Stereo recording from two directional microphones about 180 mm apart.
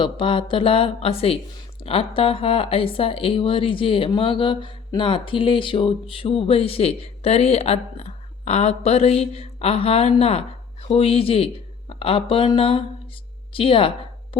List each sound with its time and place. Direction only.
0.0 s speech: 30° left (ahead or behind)